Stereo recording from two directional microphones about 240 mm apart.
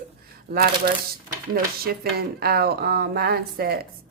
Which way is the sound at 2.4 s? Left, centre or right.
Right.